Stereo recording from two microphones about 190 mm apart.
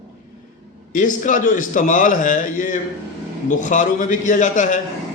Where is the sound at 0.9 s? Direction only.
45° left (ahead or behind).